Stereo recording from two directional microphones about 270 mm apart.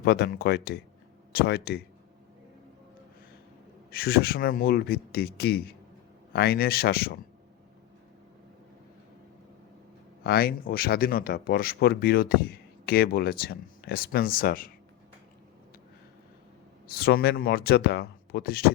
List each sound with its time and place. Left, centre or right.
0.0 s speech: left
3.9 s speech: left
10.2 s speech: left
16.8 s speech: left